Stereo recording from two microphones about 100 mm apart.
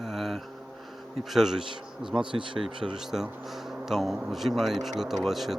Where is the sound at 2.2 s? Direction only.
55° right (ahead or behind).